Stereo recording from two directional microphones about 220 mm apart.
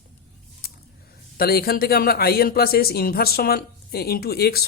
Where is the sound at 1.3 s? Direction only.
45° left (ahead or behind).